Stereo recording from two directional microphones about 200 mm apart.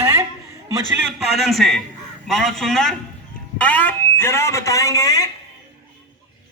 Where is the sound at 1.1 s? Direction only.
Centre (ahead or behind); by 5.2 s 15° left (ahead or behind).